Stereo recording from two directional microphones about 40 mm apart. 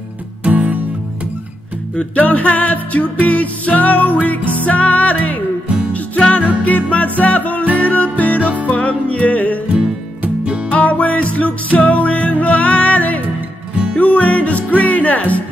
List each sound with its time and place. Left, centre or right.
0.5 s music: right
2.0 s music: left
7.6 s music: right
7.9 s music: left
8.4 s music: right
8.6 s music: left
10.7 s music: left